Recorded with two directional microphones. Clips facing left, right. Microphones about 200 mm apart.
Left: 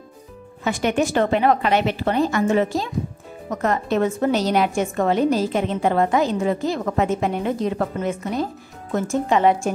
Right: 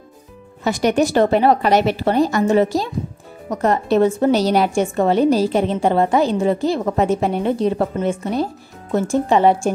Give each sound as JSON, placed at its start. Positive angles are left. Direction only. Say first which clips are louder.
{"t": 0.7, "sound": "a woman's voice", "louder": "right 4 dB", "side_deg": -40}